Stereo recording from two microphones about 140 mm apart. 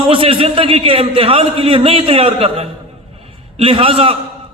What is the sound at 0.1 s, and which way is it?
A man's voice, 40° right (ahead or behind).